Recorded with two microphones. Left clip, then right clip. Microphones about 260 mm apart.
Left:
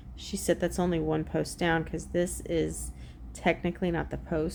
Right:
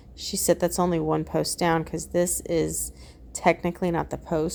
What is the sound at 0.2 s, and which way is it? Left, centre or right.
A woman's voice, centre.